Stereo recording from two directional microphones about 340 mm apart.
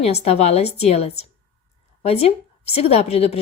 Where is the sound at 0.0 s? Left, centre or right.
Centre.